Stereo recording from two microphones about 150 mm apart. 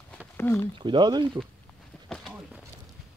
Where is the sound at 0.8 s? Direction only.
30° right (ahead or behind).